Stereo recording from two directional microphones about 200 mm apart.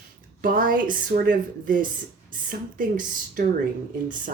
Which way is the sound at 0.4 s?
45° right (ahead or behind).